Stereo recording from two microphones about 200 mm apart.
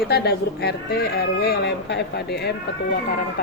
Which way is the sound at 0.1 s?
55° left (ahead or behind).